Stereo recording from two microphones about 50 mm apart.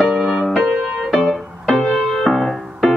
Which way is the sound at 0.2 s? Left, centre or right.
Centre.